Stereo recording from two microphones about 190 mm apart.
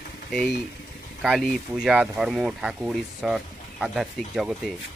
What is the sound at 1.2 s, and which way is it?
Speech, centre (ahead or behind).